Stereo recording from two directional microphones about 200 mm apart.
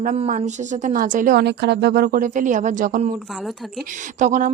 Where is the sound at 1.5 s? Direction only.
60° right (ahead or behind); by 3.1 s 40° right (ahead or behind).